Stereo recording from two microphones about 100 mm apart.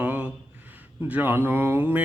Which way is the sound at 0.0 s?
15° right (ahead or behind).